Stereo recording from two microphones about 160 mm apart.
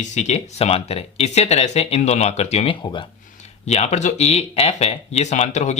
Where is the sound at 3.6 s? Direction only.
45° left (ahead or behind).